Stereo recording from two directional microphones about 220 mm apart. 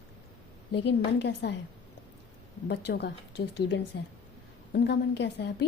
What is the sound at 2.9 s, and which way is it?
A woman's voice, 50° left (ahead or behind).